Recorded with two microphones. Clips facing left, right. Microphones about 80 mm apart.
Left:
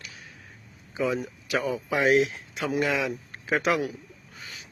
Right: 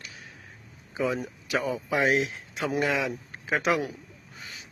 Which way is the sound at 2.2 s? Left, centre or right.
Right.